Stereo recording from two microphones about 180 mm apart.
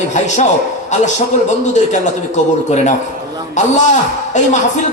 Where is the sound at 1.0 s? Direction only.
40° left (ahead or behind).